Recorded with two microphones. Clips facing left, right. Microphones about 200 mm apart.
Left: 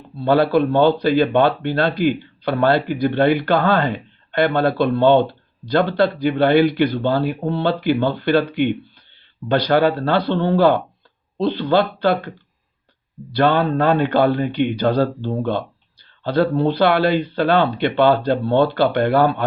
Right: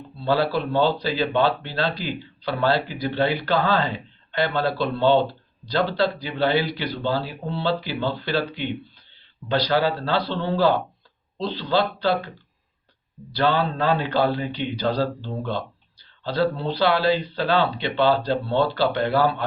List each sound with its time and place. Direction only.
0.3 s speech: 55° left (ahead or behind)
13.3 s speech: 55° left (ahead or behind)